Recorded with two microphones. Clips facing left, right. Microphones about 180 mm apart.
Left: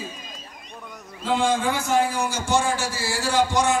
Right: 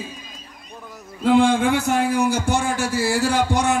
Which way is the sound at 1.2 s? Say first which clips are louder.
Right 6 dB; 55° right (ahead or behind).